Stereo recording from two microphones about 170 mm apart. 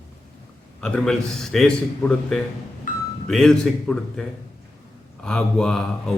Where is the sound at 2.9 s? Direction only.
50° left (ahead or behind).